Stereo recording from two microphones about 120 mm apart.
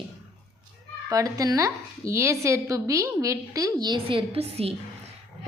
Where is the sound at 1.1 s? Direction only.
30° right (ahead or behind); by 4.8 s 55° right (ahead or behind).